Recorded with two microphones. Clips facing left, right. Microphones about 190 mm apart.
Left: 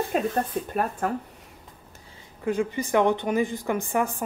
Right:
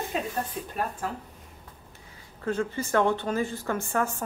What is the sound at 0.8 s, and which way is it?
Speech, 55° left (ahead or behind).